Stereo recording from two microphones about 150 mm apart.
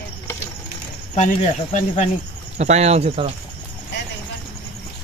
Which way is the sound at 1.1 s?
50° left (ahead or behind).